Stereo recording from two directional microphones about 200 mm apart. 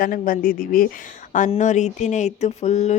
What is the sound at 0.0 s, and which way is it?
Speech, 45° left (ahead or behind).